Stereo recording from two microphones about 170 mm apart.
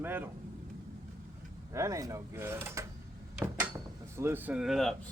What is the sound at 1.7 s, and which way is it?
Speech, 20° right (ahead or behind).